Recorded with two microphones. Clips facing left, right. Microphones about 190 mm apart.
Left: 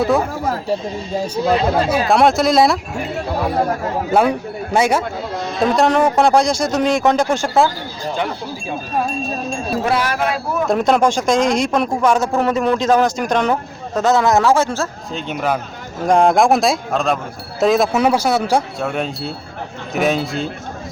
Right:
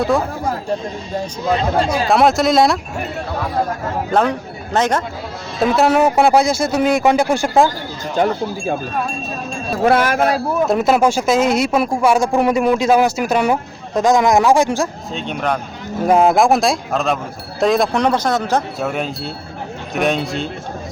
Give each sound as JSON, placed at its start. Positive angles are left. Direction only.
{"t": 0.7, "sound": "speech", "side_deg": 5}
{"t": 4.1, "sound": "a man's voice", "side_deg": 10}
{"t": 5.5, "sound": "speech", "side_deg": -5}
{"t": 8.1, "sound": "speech", "side_deg": -45}
{"t": 9.8, "sound": "speech", "side_deg": -50}
{"t": 10.7, "sound": "speech", "side_deg": -5}
{"t": 15.1, "sound": "speech", "side_deg": 5}
{"t": 18.8, "sound": "speech", "side_deg": 0}